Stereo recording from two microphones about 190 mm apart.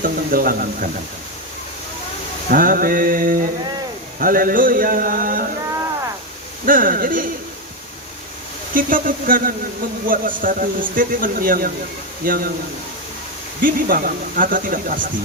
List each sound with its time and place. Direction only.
0.0 s a man's voice: 50° right (ahead or behind)
2.5 s a man's voice: 45° right (ahead or behind)
6.7 s a man's voice: 45° right (ahead or behind)
8.7 s a man's voice: 45° right (ahead or behind)
13.6 s a man's voice: 45° right (ahead or behind)